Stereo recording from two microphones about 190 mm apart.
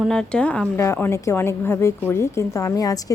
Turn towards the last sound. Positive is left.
turn(degrees=20)  # may be behind; listen again after turning